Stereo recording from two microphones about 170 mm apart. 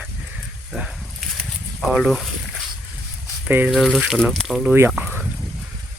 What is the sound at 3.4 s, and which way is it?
Speech, 10° right (ahead or behind).